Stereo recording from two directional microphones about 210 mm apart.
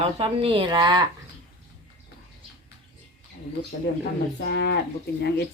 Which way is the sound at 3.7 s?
45° left (ahead or behind).